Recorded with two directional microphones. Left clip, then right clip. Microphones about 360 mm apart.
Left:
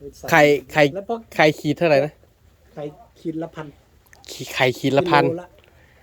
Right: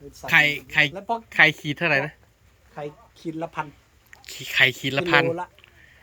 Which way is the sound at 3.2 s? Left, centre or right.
Centre.